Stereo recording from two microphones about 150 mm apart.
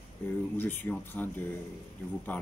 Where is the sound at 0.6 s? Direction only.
15° left (ahead or behind).